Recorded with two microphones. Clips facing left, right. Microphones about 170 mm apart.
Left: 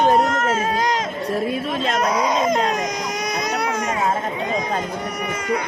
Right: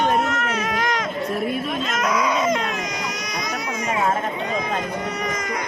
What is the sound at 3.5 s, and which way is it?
Baby cry, 65° left (ahead or behind).